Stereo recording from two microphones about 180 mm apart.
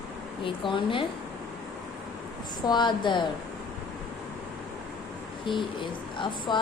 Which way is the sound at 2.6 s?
25° left (ahead or behind).